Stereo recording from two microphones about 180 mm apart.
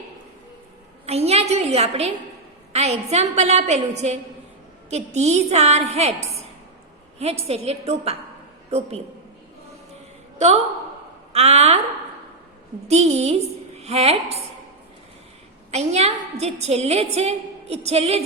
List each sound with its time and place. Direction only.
1.0 s a sound: 35° right (ahead or behind)
2.7 s a woman's voice: 35° right (ahead or behind)
10.3 s a woman's voice: 40° right (ahead or behind)
12.9 s a woman's voice: 40° right (ahead or behind)
15.7 s a woman's voice: 35° right (ahead or behind)